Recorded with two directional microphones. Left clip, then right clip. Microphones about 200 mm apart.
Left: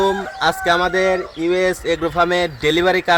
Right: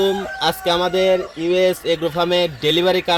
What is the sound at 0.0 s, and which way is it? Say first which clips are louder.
Chicken: left 1 dB; 5° left (ahead or behind).